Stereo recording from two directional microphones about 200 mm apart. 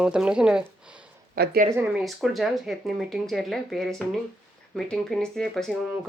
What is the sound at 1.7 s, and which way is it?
Speech, 5° right (ahead or behind).